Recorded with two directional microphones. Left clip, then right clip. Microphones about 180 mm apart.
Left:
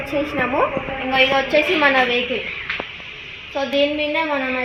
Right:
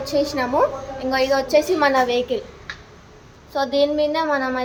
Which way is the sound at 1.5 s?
25° right (ahead or behind).